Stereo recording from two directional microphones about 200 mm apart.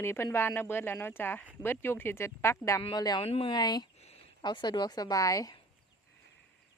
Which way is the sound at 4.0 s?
30° left (ahead or behind).